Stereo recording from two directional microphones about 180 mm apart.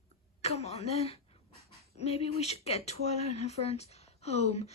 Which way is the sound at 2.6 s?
35° left (ahead or behind).